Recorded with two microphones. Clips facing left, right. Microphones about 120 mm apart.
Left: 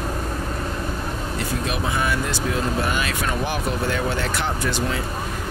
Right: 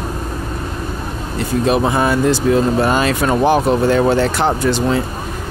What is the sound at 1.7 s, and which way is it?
Speech, 35° right (ahead or behind).